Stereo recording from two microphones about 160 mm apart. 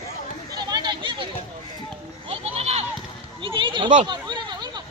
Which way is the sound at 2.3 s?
40° right (ahead or behind).